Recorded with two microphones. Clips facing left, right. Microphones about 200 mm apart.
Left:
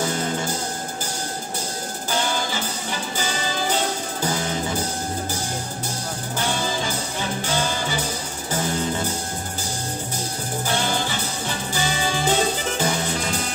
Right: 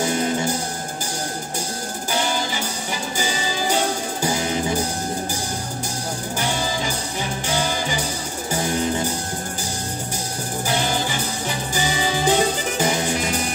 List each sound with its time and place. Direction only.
0.0 s music: 10° right (ahead or behind)
2.1 s music: 10° right (ahead or behind)
7.4 s music: 10° right (ahead or behind)
10.7 s music: 15° right (ahead or behind)